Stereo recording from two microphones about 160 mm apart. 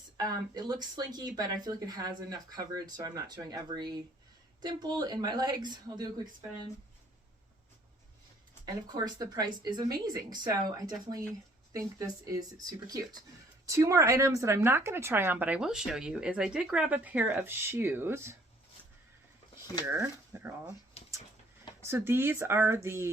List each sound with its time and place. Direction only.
0.2 s speech: 25° right (ahead or behind)
8.6 s speech: 25° right (ahead or behind)
19.8 s speech: 15° right (ahead or behind)
21.0 s dog: 40° left (ahead or behind)
21.8 s speech: 15° right (ahead or behind)